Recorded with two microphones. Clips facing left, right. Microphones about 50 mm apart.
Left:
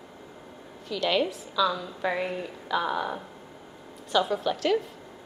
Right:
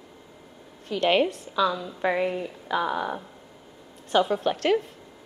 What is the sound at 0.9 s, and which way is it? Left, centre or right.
A woman's voice, right.